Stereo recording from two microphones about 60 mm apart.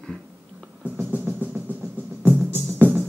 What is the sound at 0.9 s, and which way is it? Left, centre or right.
Music, right.